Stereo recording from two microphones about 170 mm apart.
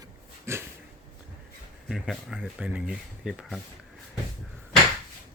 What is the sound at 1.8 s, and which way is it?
Speech, 5° right (ahead or behind).